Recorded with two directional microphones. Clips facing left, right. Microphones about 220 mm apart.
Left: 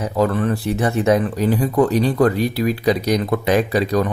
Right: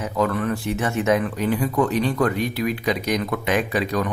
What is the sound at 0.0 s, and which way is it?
Speech, 35° left (ahead or behind).